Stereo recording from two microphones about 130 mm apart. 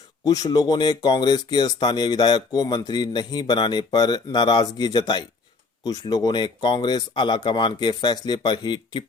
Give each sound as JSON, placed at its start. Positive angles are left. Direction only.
{"t": 0.3, "sound": "speech", "side_deg": 30}